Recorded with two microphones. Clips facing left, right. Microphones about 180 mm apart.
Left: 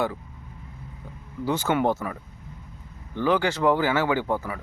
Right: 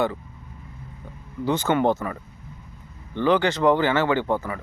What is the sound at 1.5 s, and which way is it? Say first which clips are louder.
Speech: right 2 dB; 5° left (ahead or behind).